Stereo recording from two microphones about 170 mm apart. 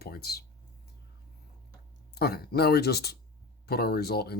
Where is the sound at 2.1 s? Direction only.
65° left (ahead or behind).